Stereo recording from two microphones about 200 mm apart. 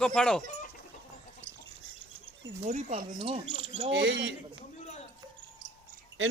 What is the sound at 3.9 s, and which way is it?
Speech, 60° right (ahead or behind).